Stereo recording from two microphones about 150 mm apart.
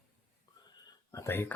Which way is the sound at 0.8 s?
20° left (ahead or behind).